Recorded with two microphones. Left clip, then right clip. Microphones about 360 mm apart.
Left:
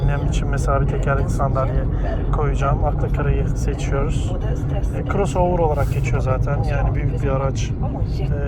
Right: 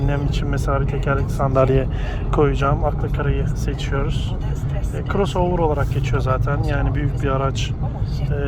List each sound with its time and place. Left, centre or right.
0.7 s speech: centre
5.1 s speech: centre